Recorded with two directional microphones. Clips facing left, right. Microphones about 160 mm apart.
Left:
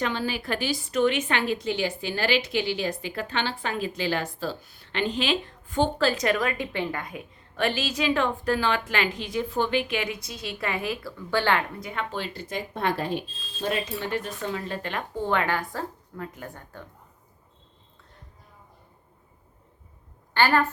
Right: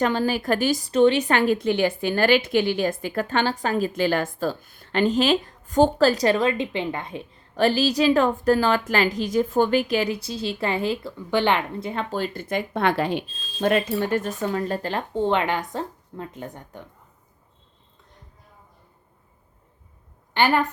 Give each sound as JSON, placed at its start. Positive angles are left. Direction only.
{"t": 0.0, "sound": "a woman's voice", "side_deg": -45}
{"t": 12.1, "sound": "speech", "side_deg": -45}
{"t": 20.3, "sound": "a woman's voice", "side_deg": -15}